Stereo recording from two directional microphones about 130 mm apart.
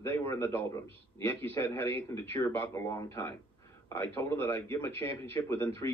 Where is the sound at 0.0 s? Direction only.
20° left (ahead or behind).